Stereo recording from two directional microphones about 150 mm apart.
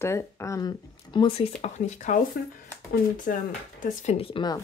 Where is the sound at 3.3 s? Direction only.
70° left (ahead or behind).